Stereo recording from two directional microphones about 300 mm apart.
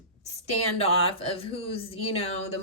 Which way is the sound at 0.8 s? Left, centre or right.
Centre.